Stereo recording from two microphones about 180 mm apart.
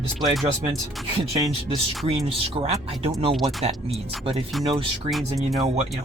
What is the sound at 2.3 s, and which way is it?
Speech, 35° right (ahead or behind).